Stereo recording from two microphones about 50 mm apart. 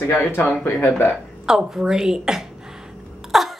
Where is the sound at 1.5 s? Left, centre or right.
Centre.